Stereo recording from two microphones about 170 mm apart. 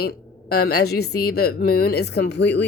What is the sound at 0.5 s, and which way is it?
A woman's voice, 70° left (ahead or behind).